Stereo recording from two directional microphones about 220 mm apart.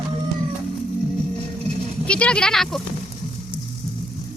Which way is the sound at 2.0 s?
5° left (ahead or behind).